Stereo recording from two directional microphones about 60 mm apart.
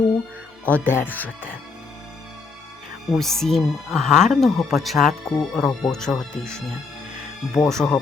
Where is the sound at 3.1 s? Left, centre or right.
Centre.